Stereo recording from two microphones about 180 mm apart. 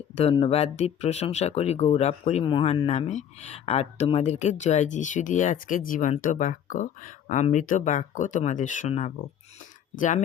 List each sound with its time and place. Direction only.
0.2 s speech: 30° left (ahead or behind)